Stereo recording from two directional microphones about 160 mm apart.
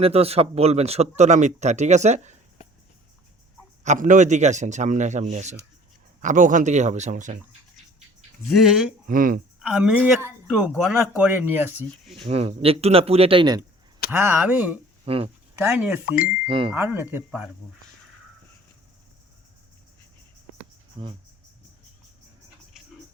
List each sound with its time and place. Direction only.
0.0 s speech: 40° right (ahead or behind)
3.8 s speech: 55° right (ahead or behind)
8.5 s speech: centre (ahead or behind)
9.0 s speech: 60° right (ahead or behind)
9.6 s a woman's voice: 5° right (ahead or behind)
12.2 s speech: 40° right (ahead or behind)
14.1 s a woman's voice: 10° right (ahead or behind)
15.0 s speech: 35° right (ahead or behind)
15.7 s a woman's voice: 10° right (ahead or behind)
16.5 s speech: 35° right (ahead or behind)
16.7 s a woman's voice: 15° right (ahead or behind)
21.0 s speech: 30° right (ahead or behind)